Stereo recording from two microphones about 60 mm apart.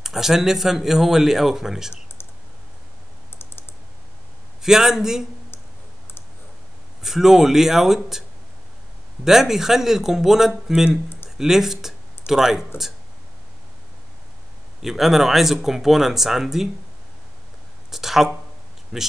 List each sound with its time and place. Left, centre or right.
0.0 s speech: centre
4.6 s speech: centre
7.0 s speech: centre
9.2 s speech: centre
14.8 s speech: centre
17.9 s speech: centre